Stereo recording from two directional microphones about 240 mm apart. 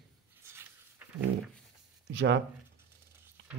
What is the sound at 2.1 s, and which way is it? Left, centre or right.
Speech, right.